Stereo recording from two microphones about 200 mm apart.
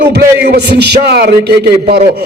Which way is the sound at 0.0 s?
55° right (ahead or behind).